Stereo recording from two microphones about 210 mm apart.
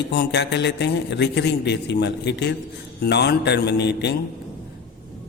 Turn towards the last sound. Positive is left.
turn(degrees=55)  # may be behind; listen again after turning